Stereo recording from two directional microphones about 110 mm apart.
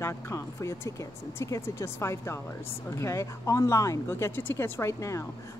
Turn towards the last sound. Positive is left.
turn(degrees=25)  # may be behind; listen again after turning